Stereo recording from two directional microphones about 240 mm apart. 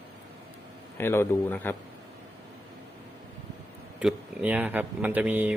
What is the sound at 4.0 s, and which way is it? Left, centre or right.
Speech, centre.